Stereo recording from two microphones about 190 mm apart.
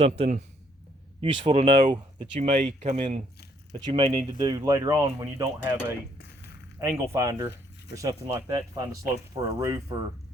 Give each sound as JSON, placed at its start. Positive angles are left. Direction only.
{"t": 0.0, "sound": "speech", "side_deg": -35}
{"t": 6.1, "sound": "a sound", "side_deg": 60}
{"t": 6.7, "sound": "speech", "side_deg": -15}